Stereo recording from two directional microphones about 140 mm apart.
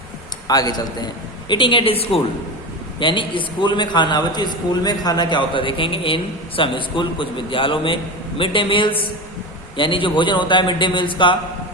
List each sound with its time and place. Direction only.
0.4 s a man's voice: 25° left (ahead or behind)